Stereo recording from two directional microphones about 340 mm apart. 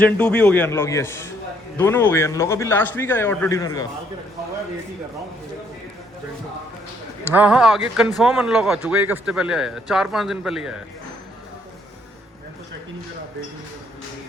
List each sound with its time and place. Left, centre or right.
0.0 s a man's voice: centre
7.3 s a man's voice: centre